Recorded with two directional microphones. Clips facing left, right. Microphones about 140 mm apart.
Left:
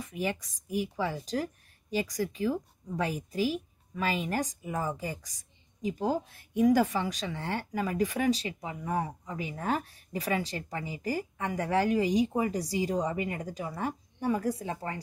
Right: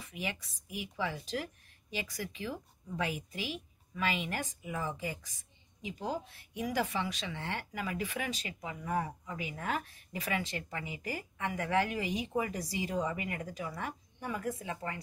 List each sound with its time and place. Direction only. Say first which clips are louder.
0.0 s speech: left 7 dB; 45° left (ahead or behind)